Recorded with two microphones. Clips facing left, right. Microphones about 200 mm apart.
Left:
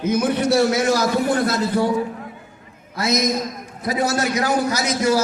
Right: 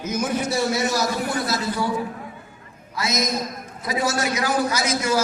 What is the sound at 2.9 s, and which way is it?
A man's voice, 55° left (ahead or behind).